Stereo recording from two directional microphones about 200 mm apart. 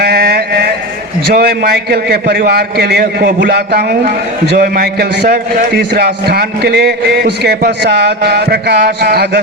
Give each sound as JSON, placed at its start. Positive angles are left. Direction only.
{"t": 0.0, "sound": "mantra", "side_deg": -50}
{"t": 1.3, "sound": "a man's voice", "side_deg": -50}